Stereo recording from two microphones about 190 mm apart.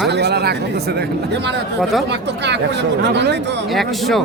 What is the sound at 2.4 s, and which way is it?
Speech, 65° right (ahead or behind).